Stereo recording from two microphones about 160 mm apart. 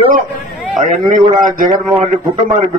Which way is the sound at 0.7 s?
55° right (ahead or behind).